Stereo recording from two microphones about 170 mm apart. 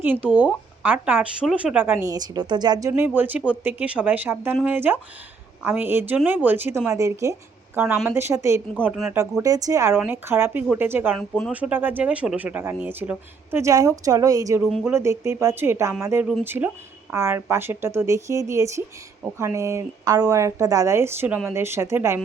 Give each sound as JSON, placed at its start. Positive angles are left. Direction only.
{"t": 0.0, "sound": "speech", "side_deg": -10}
{"t": 2.9, "sound": "speech", "side_deg": -10}
{"t": 7.8, "sound": "speech", "side_deg": -10}
{"t": 8.8, "sound": "speech", "side_deg": -5}
{"t": 9.4, "sound": "speech", "side_deg": -20}
{"t": 11.2, "sound": "speech", "side_deg": 5}
{"t": 11.5, "sound": "speech", "side_deg": -10}
{"t": 14.6, "sound": "speech", "side_deg": 0}
{"t": 14.8, "sound": "speech", "side_deg": -15}